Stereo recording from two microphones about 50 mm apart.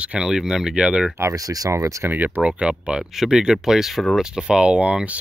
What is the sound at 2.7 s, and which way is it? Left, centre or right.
Speech, centre.